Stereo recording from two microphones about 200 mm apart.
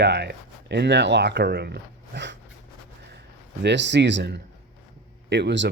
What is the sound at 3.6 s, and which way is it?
Speech, 60° right (ahead or behind).